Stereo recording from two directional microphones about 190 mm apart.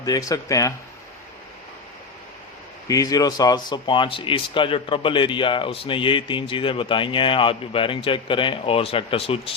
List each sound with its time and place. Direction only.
0.0 s speech: 20° left (ahead or behind)
2.8 s speech: 20° left (ahead or behind)